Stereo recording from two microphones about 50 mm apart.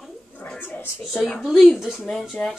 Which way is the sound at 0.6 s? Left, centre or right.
Left.